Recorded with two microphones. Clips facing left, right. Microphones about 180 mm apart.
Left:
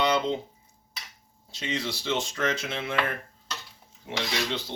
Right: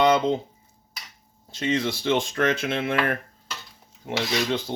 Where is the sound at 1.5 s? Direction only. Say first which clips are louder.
Right 7 dB; 55° right (ahead or behind).